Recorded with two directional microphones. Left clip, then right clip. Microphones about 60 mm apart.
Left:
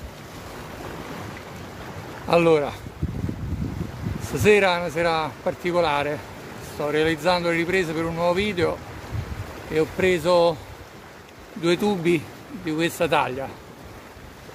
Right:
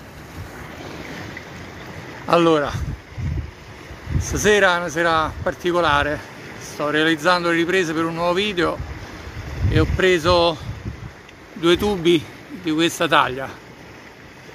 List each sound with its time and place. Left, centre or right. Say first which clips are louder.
2.4 s speech: right 2 dB; left
4.3 s speech: right 2 dB; left
6.9 s speech: right 4 dB; left
9.8 s speech: right 3 dB; left
11.6 s speech: right 4 dB; left; by 13.5 s centre